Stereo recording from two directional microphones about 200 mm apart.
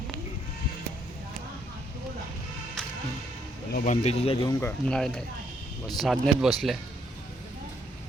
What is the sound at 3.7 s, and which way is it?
Speech, 40° left (ahead or behind).